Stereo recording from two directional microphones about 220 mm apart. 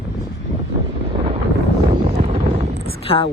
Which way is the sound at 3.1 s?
25° left (ahead or behind).